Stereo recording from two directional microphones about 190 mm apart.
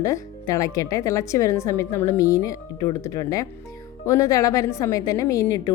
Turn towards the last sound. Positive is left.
turn(degrees=15)  # may be behind; listen again after turning